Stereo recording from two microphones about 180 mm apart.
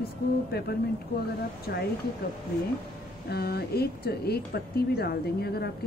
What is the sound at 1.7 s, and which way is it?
Speech, 60° left (ahead or behind).